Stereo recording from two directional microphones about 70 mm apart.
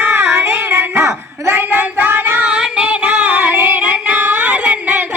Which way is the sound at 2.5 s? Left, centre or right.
Centre.